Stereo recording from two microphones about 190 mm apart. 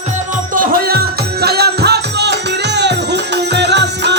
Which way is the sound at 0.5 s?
50° right (ahead or behind).